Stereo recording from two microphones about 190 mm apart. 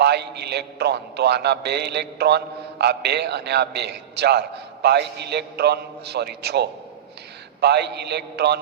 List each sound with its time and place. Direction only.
0.0 s a man's voice: 60° right (ahead or behind)